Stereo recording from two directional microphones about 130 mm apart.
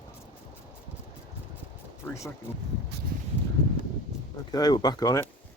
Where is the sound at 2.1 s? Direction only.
20° left (ahead or behind).